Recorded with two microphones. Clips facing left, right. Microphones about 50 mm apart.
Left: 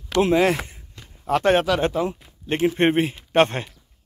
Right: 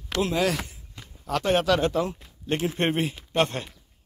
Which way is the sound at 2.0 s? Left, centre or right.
Left.